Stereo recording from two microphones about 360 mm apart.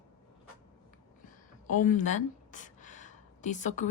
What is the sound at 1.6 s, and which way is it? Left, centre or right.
Speech, left.